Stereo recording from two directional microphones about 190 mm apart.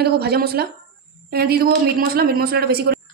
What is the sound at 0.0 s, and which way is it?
A woman's voice, 55° right (ahead or behind).